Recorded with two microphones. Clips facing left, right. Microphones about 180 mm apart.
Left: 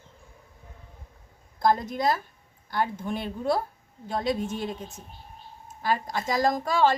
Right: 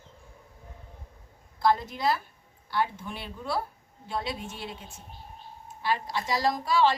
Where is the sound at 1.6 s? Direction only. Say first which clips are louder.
Left 2 dB; 45° left (ahead or behind).